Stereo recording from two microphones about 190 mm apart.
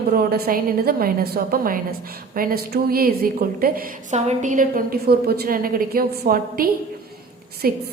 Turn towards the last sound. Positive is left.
turn(degrees=-50)  # may be behind; listen again after turning